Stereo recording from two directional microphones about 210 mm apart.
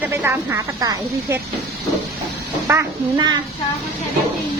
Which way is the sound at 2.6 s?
15° right (ahead or behind).